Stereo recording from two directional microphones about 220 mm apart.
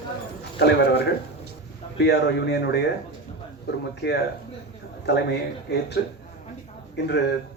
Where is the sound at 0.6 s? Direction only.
50° left (ahead or behind).